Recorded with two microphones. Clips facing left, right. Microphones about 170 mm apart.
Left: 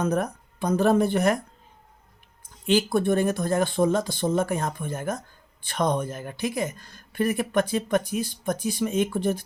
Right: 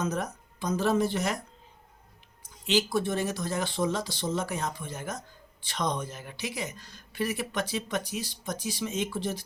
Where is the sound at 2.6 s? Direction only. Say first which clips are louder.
Left 5 dB; 55° left (ahead or behind).